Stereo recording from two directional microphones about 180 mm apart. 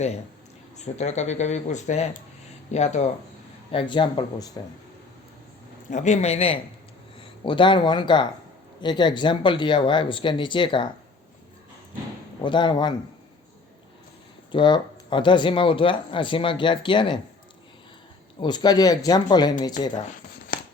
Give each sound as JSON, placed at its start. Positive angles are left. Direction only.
{"t": 0.9, "sound": "speech", "side_deg": 40}
{"t": 3.7, "sound": "speech", "side_deg": 30}
{"t": 5.9, "sound": "speech", "side_deg": 40}
{"t": 12.4, "sound": "speech", "side_deg": 25}
{"t": 14.5, "sound": "speech", "side_deg": 25}
{"t": 18.3, "sound": "speech", "side_deg": 25}